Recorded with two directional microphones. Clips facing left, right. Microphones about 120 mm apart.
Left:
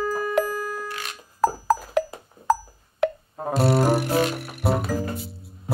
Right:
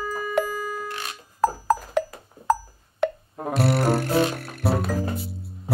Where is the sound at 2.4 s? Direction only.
Centre (ahead or behind).